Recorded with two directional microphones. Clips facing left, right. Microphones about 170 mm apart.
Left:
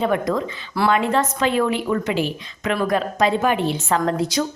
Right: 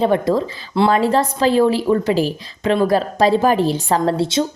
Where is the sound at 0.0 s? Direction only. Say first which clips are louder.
Right 4 dB; 30° right (ahead or behind).